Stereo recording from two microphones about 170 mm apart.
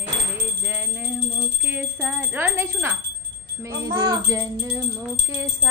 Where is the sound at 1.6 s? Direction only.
10° right (ahead or behind).